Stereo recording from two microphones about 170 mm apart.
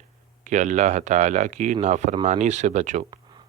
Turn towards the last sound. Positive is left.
turn(degrees=-45)  # may be behind; listen again after turning